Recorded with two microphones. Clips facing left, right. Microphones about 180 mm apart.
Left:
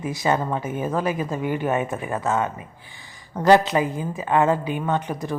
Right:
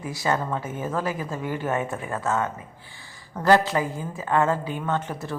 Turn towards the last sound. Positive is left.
turn(degrees=15)  # may be behind; listen again after turning